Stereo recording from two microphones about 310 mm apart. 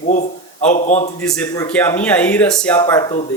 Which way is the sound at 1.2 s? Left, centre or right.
Centre.